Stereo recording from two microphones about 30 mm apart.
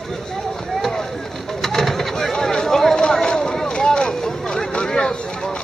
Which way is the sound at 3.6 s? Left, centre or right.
Left.